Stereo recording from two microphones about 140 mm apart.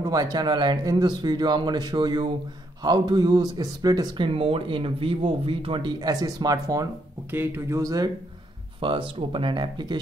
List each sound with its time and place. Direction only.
0.0 s speech: 25° right (ahead or behind)
4.3 s speech: 40° right (ahead or behind); by 6.9 s 25° right (ahead or behind)
7.2 s speech: 15° right (ahead or behind)
8.8 s speech: 40° right (ahead or behind)